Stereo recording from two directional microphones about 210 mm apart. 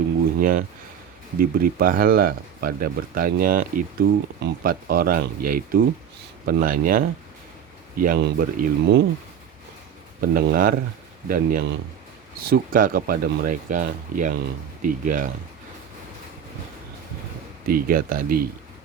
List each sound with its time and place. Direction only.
0.3 s speech: 40° right (ahead or behind)
10.2 s speech: 45° right (ahead or behind)
17.7 s speech: 45° right (ahead or behind)